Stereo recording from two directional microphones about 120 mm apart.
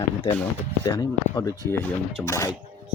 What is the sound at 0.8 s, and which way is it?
Speech, 30° left (ahead or behind).